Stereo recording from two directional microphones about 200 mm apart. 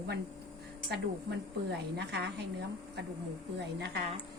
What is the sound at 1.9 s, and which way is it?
Speech, 55° right (ahead or behind).